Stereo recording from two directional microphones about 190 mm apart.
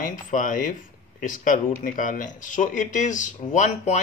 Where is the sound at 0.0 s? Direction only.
45° left (ahead or behind).